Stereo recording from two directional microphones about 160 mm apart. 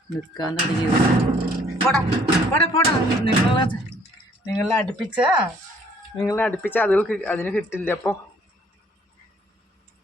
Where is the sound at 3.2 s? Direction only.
30° left (ahead or behind).